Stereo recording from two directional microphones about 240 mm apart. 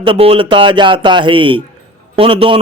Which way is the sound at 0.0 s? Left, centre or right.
Right.